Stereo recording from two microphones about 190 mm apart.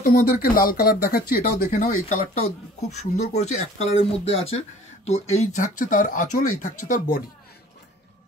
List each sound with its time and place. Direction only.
0.0 s speech: 50° left (ahead or behind)